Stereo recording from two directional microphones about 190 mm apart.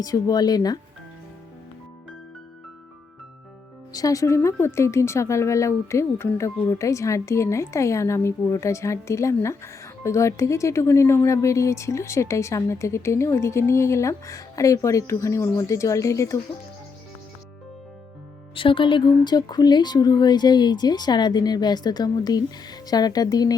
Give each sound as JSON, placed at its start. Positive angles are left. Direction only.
{"t": 0.0, "sound": "speech", "side_deg": 20}
{"t": 3.9, "sound": "speech", "side_deg": 15}
{"t": 18.5, "sound": "speech", "side_deg": 25}